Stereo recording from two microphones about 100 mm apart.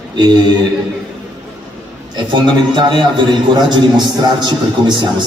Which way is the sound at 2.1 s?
50° right (ahead or behind).